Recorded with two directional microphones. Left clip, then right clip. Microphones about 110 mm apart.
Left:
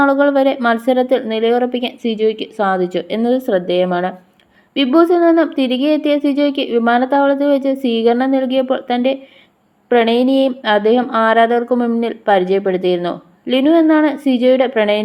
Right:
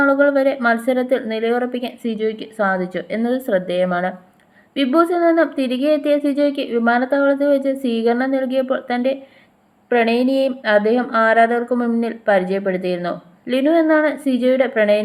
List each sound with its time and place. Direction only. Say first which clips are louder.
0.0 s speech: left 2 dB; 35° left (ahead or behind)